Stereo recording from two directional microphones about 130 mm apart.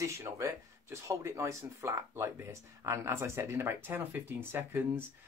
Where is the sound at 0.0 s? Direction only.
20° right (ahead or behind).